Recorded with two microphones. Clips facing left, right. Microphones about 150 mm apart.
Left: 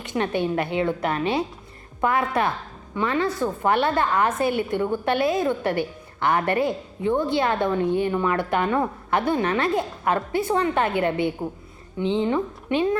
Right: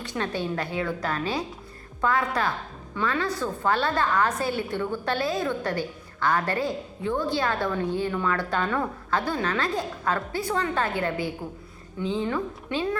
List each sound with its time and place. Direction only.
0.0 s a woman's voice: 20° left (ahead or behind)
4.3 s a woman's voice: 55° left (ahead or behind)
4.7 s a woman's voice: 20° left (ahead or behind)